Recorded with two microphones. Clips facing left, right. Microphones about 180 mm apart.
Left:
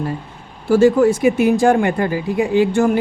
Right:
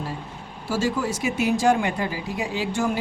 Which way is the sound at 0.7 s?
55° left (ahead or behind).